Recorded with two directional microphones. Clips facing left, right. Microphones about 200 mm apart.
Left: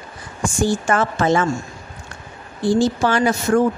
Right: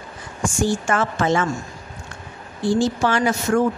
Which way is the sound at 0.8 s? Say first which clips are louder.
Left 2 dB; 35° left (ahead or behind).